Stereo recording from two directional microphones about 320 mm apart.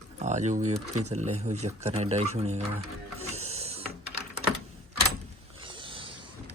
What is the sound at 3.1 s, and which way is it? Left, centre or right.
Printer, centre.